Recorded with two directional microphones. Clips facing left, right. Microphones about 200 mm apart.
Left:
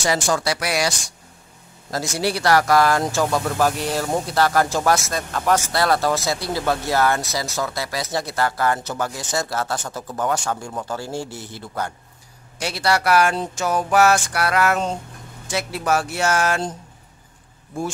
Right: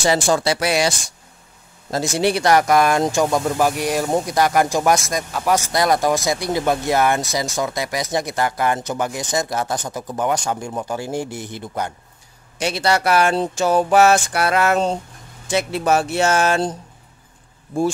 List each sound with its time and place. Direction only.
0.0 s speech: 25° right (ahead or behind)